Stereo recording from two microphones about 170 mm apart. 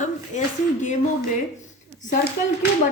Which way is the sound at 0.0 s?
45° left (ahead or behind).